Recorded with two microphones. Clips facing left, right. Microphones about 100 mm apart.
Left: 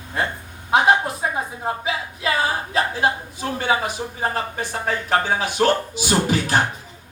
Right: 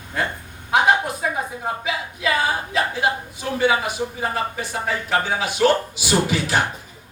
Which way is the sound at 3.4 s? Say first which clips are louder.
Right 2 dB; 40° left (ahead or behind).